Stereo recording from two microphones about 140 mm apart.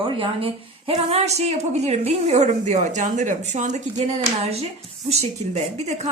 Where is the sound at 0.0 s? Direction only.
40° right (ahead or behind).